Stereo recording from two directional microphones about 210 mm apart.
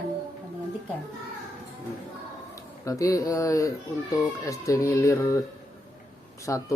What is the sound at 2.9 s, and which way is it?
Speech, 15° left (ahead or behind).